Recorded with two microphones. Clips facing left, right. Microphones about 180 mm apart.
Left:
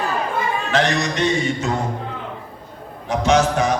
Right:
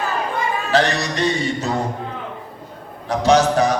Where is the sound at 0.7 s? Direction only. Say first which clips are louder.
Right 2 dB; 35° right (ahead or behind).